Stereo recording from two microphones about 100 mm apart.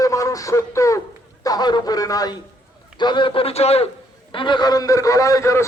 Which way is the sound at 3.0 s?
50° left (ahead or behind).